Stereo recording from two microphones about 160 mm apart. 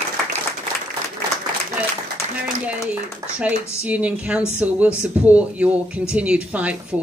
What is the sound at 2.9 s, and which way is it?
Speech, 10° right (ahead or behind).